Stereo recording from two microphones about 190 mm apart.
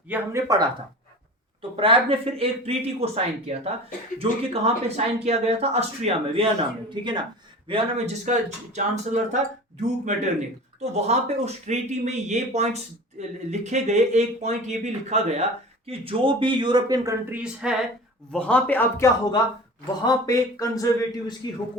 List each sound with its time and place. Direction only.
0.1 s speech: 15° right (ahead or behind)
1.7 s speech: 30° right (ahead or behind)
10.8 s speech: 35° right (ahead or behind); by 17.7 s 5° right (ahead or behind)
18.3 s speech: 5° left (ahead or behind)